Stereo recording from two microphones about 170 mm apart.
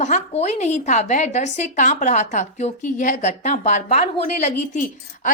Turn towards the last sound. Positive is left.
turn(degrees=50)  # may be behind; listen again after turning